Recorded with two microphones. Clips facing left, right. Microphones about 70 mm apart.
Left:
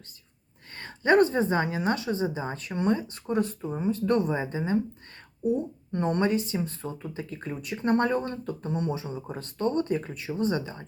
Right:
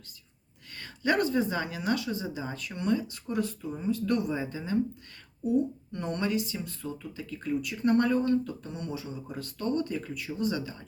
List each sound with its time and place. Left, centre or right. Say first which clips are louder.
0.8 s speech: left 6 dB; left
5.9 s speech: left 8 dB; left